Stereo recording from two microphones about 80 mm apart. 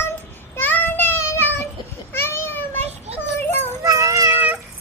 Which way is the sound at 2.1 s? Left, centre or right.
Left.